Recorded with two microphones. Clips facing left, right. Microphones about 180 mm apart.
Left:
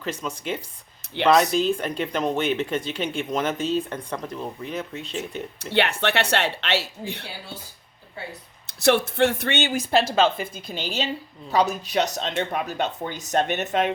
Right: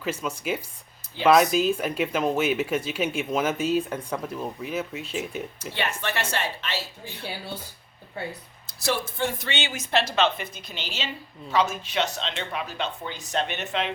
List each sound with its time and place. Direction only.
0.0 s speech: 5° right (ahead or behind)
5.7 s speech: 70° left (ahead or behind)
8.6 s speech: 70° left (ahead or behind)
9.5 s speech: 40° left (ahead or behind)